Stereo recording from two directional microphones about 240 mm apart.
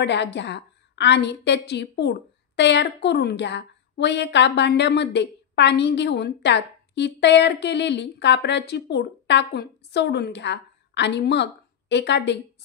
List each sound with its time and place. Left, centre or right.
0.0 s a woman's voice: left